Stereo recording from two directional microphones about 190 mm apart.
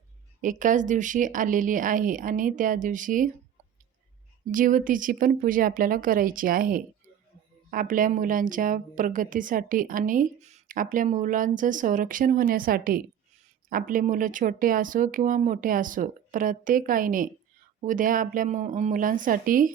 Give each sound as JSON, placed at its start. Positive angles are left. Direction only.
{"t": 0.4, "sound": "a woman's voice", "side_deg": -45}
{"t": 4.5, "sound": "a woman's voice", "side_deg": -45}